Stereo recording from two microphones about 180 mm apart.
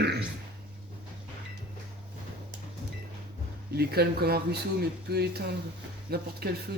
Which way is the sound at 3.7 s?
60° right (ahead or behind).